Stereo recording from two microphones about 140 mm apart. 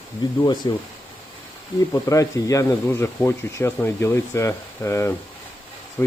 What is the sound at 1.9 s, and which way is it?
Speech, 25° left (ahead or behind).